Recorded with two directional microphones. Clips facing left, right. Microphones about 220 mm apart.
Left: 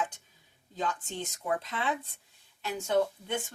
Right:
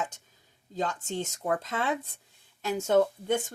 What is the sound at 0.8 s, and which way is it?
Speech, 45° right (ahead or behind).